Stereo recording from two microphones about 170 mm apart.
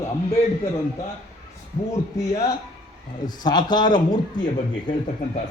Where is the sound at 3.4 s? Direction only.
25° left (ahead or behind).